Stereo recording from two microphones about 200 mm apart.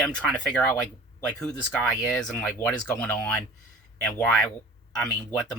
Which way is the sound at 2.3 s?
10° left (ahead or behind).